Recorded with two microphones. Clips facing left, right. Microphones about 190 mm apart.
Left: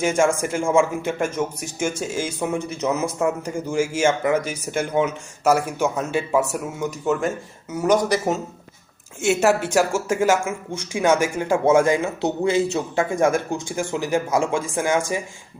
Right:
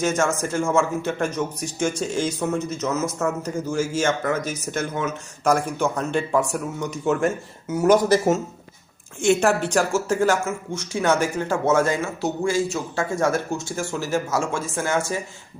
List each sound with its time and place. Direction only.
0.0 s speech: 10° left (ahead or behind)
9.2 s speech: 5° left (ahead or behind)